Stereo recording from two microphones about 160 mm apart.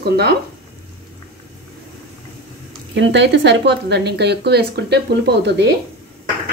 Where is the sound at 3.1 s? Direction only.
90° right.